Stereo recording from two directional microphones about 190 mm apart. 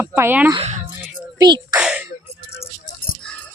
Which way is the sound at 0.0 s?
15° right (ahead or behind).